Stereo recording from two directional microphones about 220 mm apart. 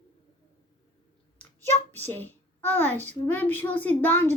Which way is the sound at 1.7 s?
30° right (ahead or behind).